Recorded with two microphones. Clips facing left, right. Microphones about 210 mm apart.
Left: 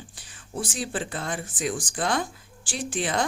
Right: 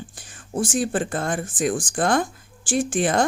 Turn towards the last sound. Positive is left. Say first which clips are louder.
# right 7 dB
turn(degrees=-50)  # may be behind; listen again after turning